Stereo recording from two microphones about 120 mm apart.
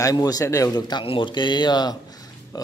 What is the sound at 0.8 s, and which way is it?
A man's voice, 40° left (ahead or behind).